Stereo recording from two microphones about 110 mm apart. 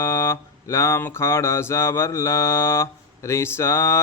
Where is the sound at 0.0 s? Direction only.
25° left (ahead or behind).